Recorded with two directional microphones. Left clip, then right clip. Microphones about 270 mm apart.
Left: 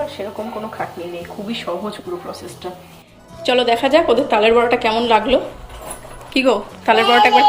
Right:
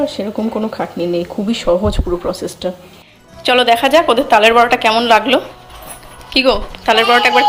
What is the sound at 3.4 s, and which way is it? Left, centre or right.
A woman's voice, centre.